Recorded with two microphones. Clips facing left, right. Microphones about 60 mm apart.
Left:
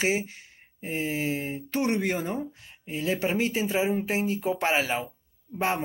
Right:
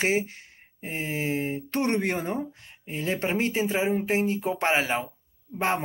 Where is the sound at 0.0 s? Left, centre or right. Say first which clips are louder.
Right 1 dB; right.